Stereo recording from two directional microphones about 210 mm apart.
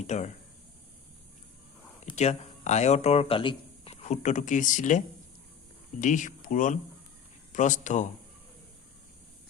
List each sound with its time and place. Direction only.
0.1 s speech: 35° left (ahead or behind)
2.0 s speech: 30° left (ahead or behind)